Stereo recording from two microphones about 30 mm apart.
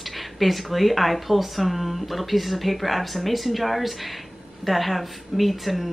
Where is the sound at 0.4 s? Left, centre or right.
Centre.